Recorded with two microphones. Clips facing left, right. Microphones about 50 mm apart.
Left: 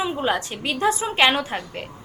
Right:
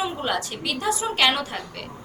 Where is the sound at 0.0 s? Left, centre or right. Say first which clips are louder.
Left 2 dB; centre.